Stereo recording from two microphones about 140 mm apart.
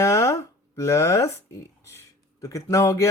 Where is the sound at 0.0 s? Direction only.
20° left (ahead or behind).